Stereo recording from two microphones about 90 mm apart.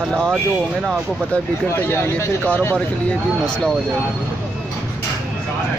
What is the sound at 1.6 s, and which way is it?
Speech, 25° left (ahead or behind).